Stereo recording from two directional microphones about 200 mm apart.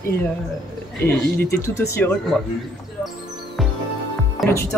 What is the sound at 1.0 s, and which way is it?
Speech, 10° left (ahead or behind).